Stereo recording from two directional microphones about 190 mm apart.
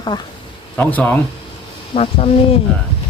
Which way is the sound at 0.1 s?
25° left (ahead or behind).